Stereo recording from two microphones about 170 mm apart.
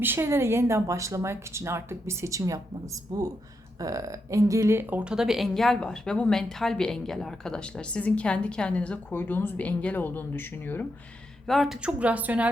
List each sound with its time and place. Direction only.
0.0 s speech: 15° right (ahead or behind); by 10.8 s 10° left (ahead or behind)
11.4 s speech: centre (ahead or behind)